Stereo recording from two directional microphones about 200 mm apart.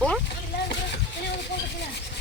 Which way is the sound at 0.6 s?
55° left (ahead or behind).